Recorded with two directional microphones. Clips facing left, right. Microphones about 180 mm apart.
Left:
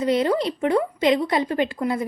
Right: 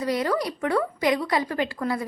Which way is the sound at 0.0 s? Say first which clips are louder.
Left 4 dB; 25° left (ahead or behind).